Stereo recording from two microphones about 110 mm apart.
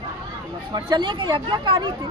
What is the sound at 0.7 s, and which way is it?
Speech, 45° right (ahead or behind).